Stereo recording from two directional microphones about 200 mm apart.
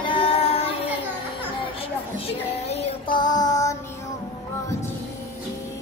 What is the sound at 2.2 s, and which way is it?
Child singing, 30° left (ahead or behind).